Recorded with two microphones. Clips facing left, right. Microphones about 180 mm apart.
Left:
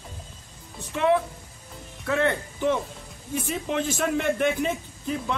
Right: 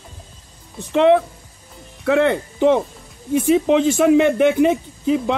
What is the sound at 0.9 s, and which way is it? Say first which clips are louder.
Speech: right 8 dB; 70° right (ahead or behind).